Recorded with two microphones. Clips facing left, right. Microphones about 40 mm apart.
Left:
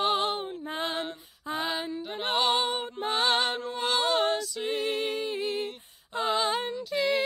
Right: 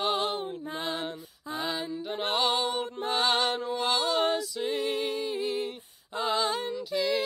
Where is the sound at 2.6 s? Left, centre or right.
Left.